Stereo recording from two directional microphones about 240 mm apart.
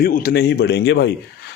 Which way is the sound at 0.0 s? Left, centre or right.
Left.